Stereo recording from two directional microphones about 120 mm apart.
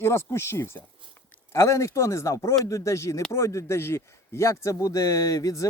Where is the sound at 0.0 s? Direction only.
20° left (ahead or behind).